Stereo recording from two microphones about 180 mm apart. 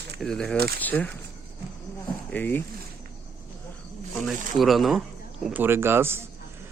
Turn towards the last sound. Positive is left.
turn(degrees=-15)  # may be behind; listen again after turning